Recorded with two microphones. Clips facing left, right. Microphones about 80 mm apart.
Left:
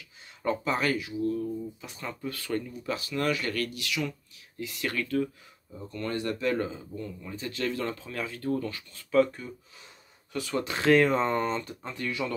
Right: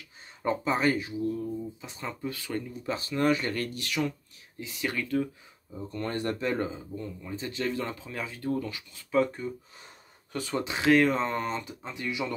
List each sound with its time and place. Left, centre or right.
0.4 s speech: right
1.2 s speech: centre
2.9 s speech: right
4.6 s speech: right
5.9 s speech: right
10.7 s speech: centre